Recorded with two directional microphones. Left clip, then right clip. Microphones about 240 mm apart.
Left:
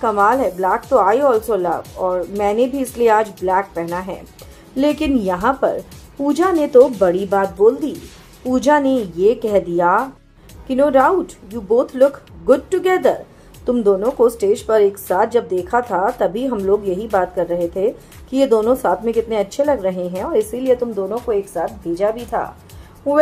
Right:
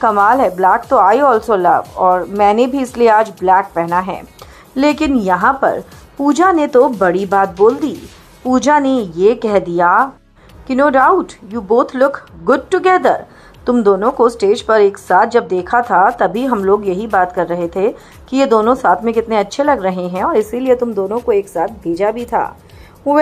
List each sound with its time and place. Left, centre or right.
0.0 s speech: centre